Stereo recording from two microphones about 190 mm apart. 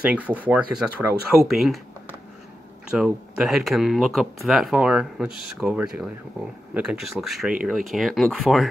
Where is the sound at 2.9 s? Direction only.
5° right (ahead or behind).